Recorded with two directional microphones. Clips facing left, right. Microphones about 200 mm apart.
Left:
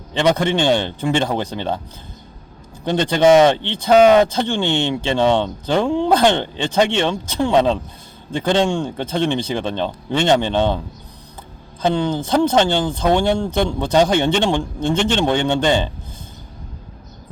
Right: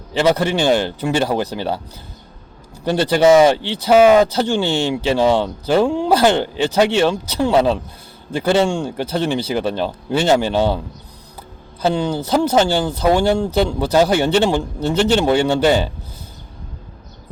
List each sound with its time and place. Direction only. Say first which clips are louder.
0.1 s speech: right 1 dB; 5° right (ahead or behind)
2.8 s speech: right 1 dB; 10° right (ahead or behind)
11.8 s speech: even; 10° right (ahead or behind)